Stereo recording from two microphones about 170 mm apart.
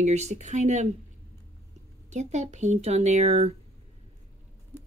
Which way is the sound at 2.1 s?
45° right (ahead or behind).